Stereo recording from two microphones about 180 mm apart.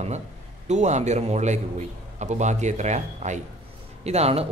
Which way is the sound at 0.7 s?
40° right (ahead or behind).